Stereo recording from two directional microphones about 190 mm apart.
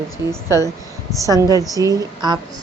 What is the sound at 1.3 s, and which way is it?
A woman's voice, 20° right (ahead or behind).